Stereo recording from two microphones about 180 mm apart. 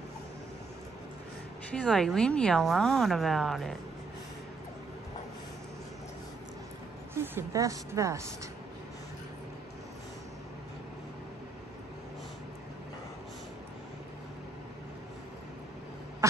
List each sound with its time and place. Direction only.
1.8 s speech: 5° left (ahead or behind)
7.2 s a woman's voice: 15° right (ahead or behind)